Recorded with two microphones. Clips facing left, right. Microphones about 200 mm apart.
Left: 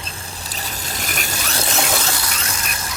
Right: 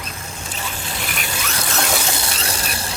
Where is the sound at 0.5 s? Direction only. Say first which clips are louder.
Right 1 dB; 40° left (ahead or behind).